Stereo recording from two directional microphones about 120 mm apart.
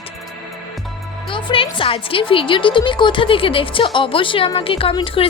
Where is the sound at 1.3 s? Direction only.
45° left (ahead or behind).